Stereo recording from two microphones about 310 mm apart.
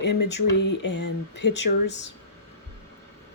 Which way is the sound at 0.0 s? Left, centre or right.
Left.